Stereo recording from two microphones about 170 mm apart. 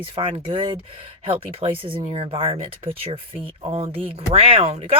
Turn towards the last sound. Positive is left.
turn(degrees=-35)  # may be behind; listen again after turning